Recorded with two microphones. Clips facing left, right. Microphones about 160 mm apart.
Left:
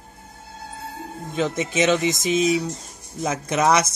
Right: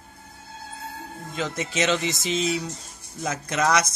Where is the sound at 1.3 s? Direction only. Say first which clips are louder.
Left 5 dB; 20° left (ahead or behind).